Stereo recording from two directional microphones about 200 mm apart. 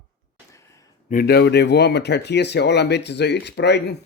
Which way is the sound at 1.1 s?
50° left (ahead or behind).